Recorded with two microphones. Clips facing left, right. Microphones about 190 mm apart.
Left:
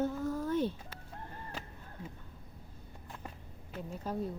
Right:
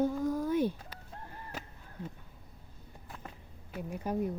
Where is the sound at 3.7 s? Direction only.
15° right (ahead or behind).